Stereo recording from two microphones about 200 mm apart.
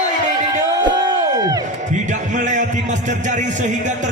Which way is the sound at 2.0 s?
40° right (ahead or behind).